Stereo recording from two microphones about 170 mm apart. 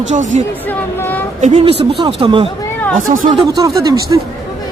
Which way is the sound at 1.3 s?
45° right (ahead or behind).